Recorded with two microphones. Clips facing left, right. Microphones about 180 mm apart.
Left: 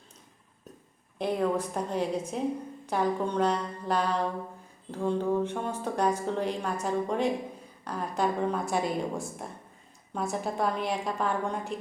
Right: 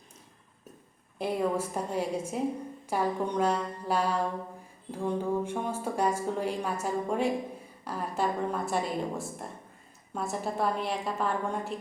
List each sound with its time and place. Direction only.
1.2 s a woman's voice: 5° right (ahead or behind)